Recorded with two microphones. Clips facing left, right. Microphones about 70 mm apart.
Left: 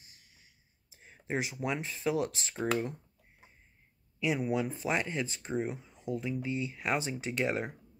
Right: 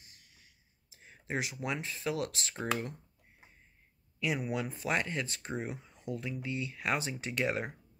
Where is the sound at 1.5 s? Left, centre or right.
Centre.